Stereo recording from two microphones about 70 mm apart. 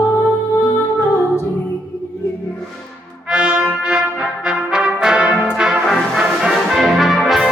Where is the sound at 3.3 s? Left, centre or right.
Centre.